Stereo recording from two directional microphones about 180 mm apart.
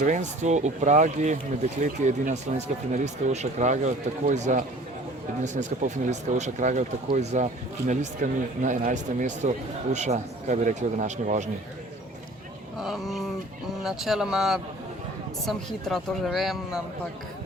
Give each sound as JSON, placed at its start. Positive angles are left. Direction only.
{"t": 0.0, "sound": "speech", "side_deg": -45}
{"t": 12.8, "sound": "speech", "side_deg": 0}